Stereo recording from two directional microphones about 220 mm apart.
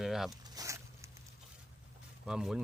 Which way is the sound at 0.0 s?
Centre (ahead or behind).